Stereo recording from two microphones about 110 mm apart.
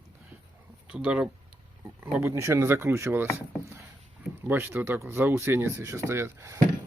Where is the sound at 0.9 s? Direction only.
10° right (ahead or behind).